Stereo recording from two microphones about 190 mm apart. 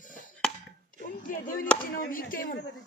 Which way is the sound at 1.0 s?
45° left (ahead or behind).